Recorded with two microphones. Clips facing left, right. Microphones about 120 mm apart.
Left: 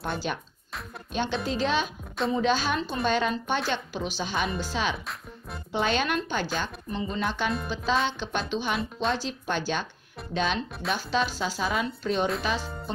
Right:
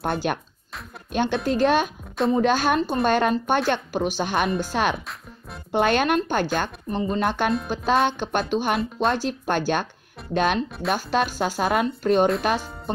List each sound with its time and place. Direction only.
0.0 s speech: 55° right (ahead or behind)